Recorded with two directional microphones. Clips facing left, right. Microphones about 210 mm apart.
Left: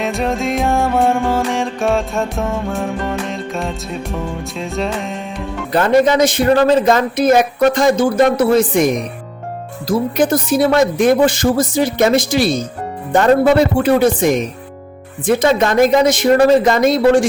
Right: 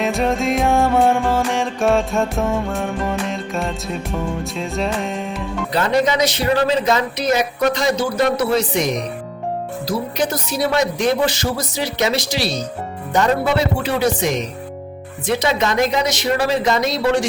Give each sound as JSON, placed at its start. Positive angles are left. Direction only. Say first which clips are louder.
{"t": 0.0, "sound": "music", "louder": "even", "side_deg": 0}
{"t": 5.7, "sound": "a man's voice", "louder": "left 6 dB", "side_deg": 50}